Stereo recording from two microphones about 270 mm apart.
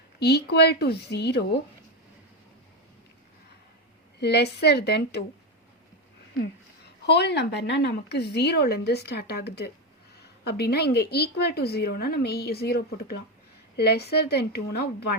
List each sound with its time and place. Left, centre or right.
0.2 s a woman's voice: left
4.2 s a woman's voice: left
7.0 s a woman's voice: left